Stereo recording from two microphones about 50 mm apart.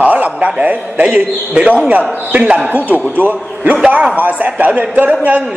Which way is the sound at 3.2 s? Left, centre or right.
Right.